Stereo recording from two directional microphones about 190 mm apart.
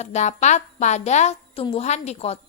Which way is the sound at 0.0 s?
35° left (ahead or behind).